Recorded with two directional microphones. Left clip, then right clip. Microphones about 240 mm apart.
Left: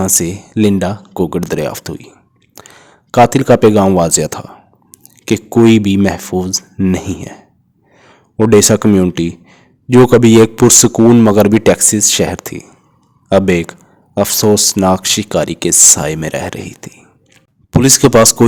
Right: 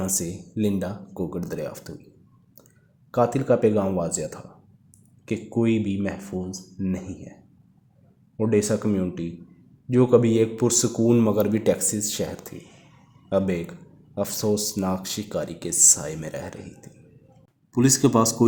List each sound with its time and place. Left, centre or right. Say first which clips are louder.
0.0 s speech: left 14 dB; left
8.4 s speech: left 14 dB; left